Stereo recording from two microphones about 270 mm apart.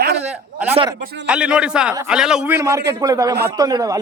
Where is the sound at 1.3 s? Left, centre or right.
Centre.